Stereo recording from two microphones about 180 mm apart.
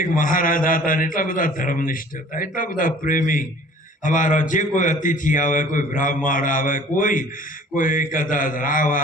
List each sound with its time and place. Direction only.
0.0 s a man's voice: 50° left (ahead or behind)